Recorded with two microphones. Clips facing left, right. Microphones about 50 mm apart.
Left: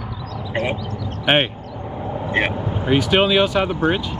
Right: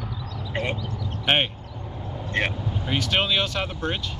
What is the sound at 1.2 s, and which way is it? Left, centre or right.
Speech, centre.